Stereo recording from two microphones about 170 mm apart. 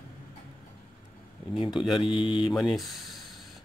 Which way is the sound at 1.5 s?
30° left (ahead or behind).